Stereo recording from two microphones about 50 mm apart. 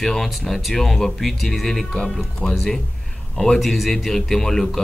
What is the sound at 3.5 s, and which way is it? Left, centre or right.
Speech, centre.